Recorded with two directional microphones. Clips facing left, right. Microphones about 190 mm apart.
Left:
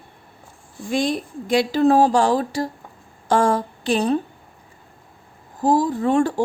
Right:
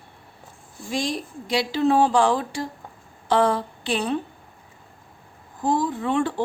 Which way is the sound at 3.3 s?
45° left (ahead or behind).